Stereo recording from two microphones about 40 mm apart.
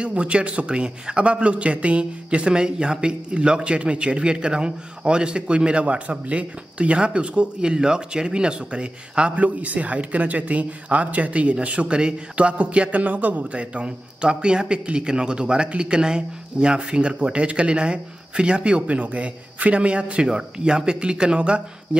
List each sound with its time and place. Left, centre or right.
0.0 s a man's voice: right
13.5 s a man's voice: right